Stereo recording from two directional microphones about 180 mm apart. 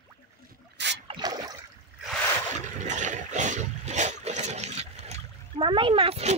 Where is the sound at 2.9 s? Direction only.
45° right (ahead or behind).